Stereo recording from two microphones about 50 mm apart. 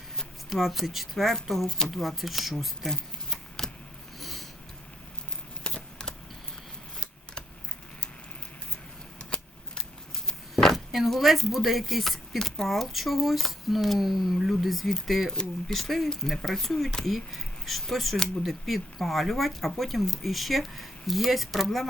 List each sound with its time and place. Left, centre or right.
0.5 s speech: centre
2.9 s a sound: centre
4.2 s sniff: centre
5.6 s typing: centre
9.3 s a sound: left
10.6 s speech: centre